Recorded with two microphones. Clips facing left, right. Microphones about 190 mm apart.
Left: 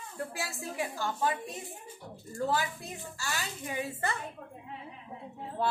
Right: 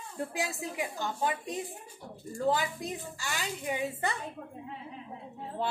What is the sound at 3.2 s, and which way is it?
Speech, 20° right (ahead or behind).